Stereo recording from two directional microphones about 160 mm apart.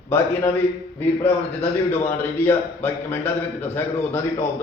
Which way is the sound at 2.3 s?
15° left (ahead or behind).